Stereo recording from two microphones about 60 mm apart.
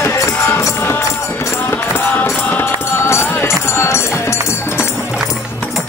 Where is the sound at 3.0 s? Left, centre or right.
Left.